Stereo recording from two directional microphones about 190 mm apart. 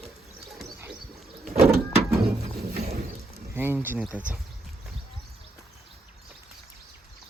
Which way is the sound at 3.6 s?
10° right (ahead or behind).